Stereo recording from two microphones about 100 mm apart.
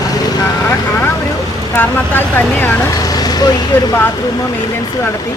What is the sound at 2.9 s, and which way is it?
Speech, 40° left (ahead or behind).